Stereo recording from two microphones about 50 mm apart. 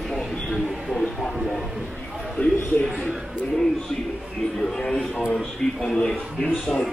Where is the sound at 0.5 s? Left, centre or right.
Centre.